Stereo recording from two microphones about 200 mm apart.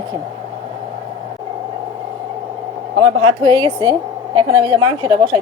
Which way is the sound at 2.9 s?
25° right (ahead or behind).